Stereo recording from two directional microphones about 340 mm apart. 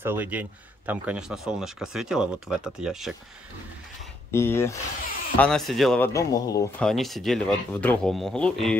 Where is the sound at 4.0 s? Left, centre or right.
Centre.